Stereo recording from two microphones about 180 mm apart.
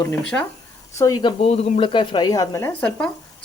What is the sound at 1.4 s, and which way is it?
Speech, 35° left (ahead or behind).